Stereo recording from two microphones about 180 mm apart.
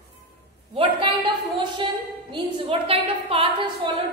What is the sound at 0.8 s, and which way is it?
A woman's voice, 30° right (ahead or behind).